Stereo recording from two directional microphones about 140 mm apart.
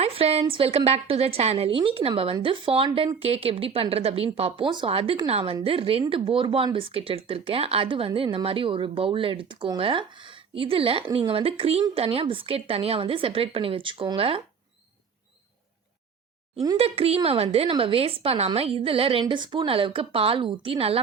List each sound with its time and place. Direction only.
0.0 s a woman's voice: 45° right (ahead or behind)
16.7 s a woman's voice: 45° right (ahead or behind)